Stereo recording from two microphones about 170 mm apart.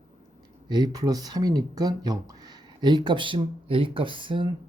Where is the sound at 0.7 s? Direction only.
20° right (ahead or behind).